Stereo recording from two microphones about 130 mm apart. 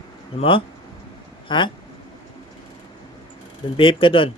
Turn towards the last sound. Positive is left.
turn(degrees=45)  # may be behind; listen again after turning